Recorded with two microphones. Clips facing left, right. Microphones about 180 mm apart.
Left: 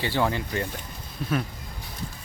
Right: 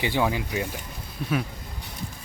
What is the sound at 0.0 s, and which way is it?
Speech, 10° right (ahead or behind).